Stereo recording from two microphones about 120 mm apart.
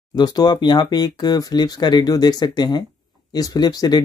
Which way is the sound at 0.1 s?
35° left (ahead or behind).